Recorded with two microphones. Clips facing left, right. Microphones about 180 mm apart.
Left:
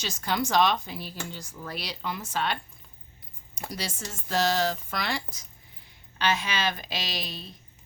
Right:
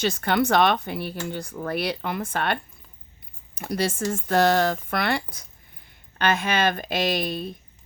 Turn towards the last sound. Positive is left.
turn(degrees=-55)  # may be behind; listen again after turning